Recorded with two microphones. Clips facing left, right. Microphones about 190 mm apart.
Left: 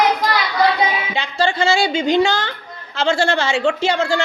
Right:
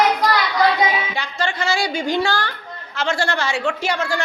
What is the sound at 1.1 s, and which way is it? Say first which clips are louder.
A woman's voice: left 5 dB; 25° left (ahead or behind).